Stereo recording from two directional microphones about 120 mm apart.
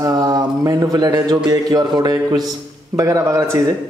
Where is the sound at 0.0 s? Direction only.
35° right (ahead or behind).